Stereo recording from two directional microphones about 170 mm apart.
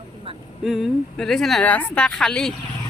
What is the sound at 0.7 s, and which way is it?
Speech, centre (ahead or behind).